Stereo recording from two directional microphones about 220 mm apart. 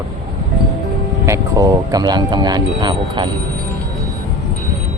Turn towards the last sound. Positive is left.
turn(degrees=-20)  # may be behind; listen again after turning